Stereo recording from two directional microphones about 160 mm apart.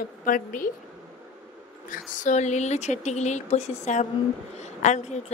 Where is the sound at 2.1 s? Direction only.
50° left (ahead or behind).